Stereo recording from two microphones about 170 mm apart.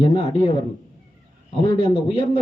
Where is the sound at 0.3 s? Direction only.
25° left (ahead or behind).